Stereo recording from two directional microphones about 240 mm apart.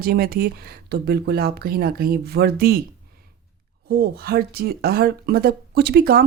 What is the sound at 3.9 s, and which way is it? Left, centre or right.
Speech, right.